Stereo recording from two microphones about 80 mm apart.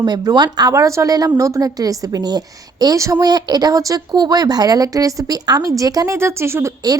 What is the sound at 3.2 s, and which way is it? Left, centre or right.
Speech, right.